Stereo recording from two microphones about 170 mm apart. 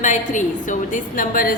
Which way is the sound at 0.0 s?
45° left (ahead or behind).